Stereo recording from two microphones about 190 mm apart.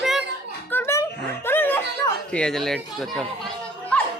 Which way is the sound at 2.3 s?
5° left (ahead or behind).